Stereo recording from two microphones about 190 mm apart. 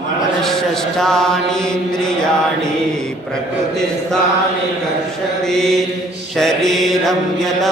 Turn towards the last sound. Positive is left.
turn(degrees=0)  # may be behind; listen again after turning